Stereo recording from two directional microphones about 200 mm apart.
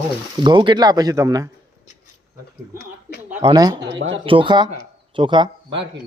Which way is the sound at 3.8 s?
65° right (ahead or behind).